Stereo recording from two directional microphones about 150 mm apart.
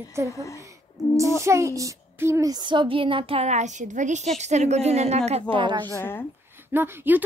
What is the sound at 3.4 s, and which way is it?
A woman's voice, 50° right (ahead or behind).